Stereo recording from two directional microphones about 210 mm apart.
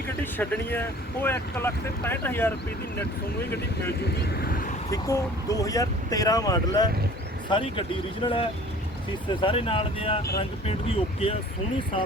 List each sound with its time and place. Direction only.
0.2 s speech: 10° left (ahead or behind)
4.2 s speech: 45° left (ahead or behind)
4.9 s speech: 15° left (ahead or behind)